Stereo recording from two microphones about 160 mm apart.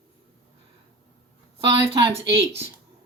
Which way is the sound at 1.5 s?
35° right (ahead or behind).